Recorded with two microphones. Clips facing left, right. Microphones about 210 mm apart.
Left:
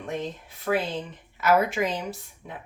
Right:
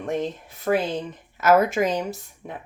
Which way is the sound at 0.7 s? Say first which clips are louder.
Right 4 dB; 45° right (ahead or behind).